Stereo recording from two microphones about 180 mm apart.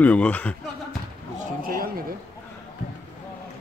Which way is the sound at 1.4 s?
50° right (ahead or behind).